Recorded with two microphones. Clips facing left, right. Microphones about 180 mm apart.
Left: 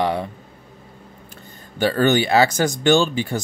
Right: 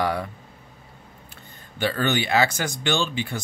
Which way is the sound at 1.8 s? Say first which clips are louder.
Left 7 dB; 40° left (ahead or behind).